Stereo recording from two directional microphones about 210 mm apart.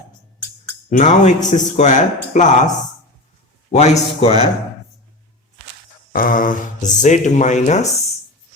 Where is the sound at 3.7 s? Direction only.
30° left (ahead or behind).